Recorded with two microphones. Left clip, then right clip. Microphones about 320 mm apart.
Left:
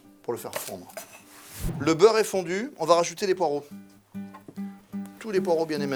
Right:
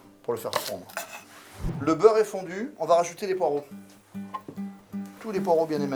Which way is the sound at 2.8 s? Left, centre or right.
Left.